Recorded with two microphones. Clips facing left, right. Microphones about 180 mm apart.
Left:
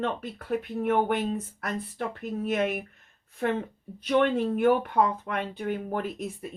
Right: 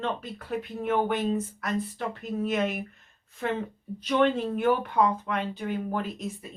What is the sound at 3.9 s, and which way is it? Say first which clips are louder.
Speech: even; 50° left (ahead or behind).